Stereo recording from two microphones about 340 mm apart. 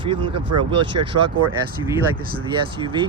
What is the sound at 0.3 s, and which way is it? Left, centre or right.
Speech, right.